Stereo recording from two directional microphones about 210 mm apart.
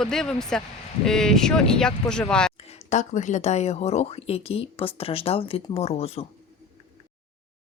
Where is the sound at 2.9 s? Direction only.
35° left (ahead or behind).